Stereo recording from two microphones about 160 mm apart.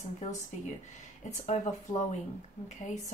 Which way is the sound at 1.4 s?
45° left (ahead or behind).